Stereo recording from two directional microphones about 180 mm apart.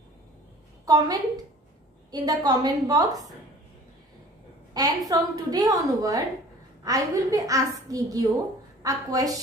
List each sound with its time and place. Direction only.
0.8 s a woman's voice: 20° right (ahead or behind)
4.7 s a woman's voice: 20° right (ahead or behind)